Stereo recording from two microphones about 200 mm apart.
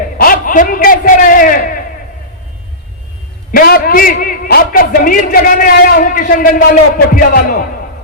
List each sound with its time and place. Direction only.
0.2 s a man's voice: 45° left (ahead or behind)
3.5 s a man's voice: 50° left (ahead or behind)